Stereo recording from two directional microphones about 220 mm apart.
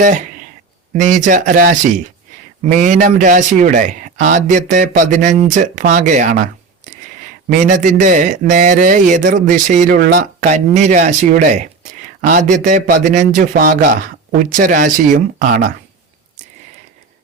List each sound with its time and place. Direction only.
0.9 s speech: 35° right (ahead or behind)
7.7 s speech: 35° right (ahead or behind)